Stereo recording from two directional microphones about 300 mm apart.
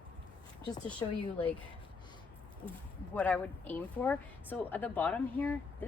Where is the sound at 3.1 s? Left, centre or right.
Centre.